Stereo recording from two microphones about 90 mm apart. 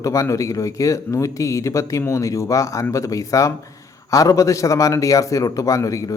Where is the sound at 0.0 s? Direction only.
35° left (ahead or behind).